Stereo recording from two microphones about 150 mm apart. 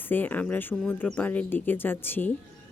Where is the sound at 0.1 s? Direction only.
10° left (ahead or behind).